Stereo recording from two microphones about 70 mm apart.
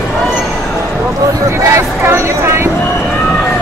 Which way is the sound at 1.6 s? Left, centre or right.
Right.